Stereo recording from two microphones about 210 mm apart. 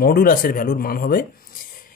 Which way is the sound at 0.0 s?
45° left (ahead or behind).